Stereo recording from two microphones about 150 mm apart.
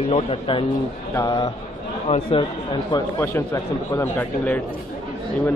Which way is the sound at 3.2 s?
20° left (ahead or behind).